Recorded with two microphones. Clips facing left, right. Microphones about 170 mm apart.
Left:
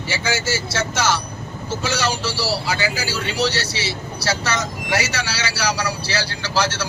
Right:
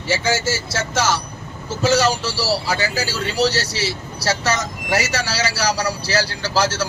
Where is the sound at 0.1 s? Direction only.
40° right (ahead or behind).